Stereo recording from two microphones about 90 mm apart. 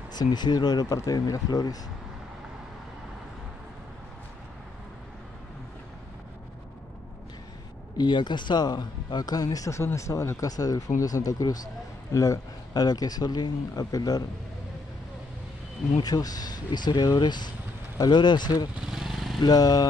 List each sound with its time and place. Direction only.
0.1 s speech: 50° left (ahead or behind)
8.0 s speech: 55° left (ahead or behind)
16.0 s speech: 45° left (ahead or behind)
18.9 s vehicle: 5° right (ahead or behind)
19.4 s speech: 45° left (ahead or behind)